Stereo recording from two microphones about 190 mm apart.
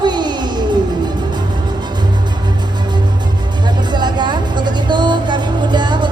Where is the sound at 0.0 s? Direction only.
20° right (ahead or behind).